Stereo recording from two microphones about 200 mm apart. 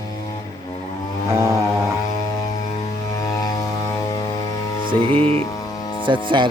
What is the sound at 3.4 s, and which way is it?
Vehicle, 20° left (ahead or behind).